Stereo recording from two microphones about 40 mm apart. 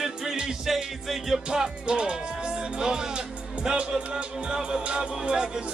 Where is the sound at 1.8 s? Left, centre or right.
Right.